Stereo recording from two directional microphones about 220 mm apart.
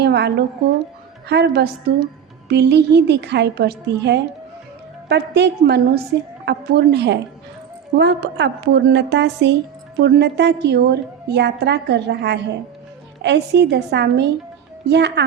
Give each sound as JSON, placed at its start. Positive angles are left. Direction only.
{"t": 0.0, "sound": "a woman's voice", "side_deg": -50}